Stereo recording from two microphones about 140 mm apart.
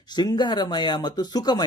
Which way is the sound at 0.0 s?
30° left (ahead or behind).